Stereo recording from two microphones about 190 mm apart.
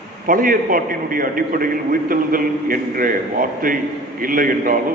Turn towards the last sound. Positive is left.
turn(degrees=-45)  # may be behind; listen again after turning